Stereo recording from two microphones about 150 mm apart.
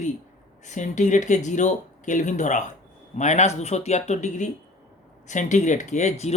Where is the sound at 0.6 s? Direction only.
55° left (ahead or behind).